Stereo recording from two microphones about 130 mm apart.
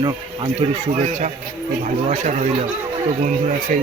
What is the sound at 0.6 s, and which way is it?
Speech, 55° right (ahead or behind).